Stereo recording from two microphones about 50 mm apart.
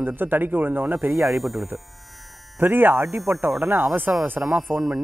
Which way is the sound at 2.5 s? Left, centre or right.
Right.